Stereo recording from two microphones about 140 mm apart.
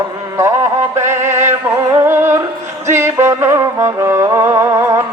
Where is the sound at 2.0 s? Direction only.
15° right (ahead or behind).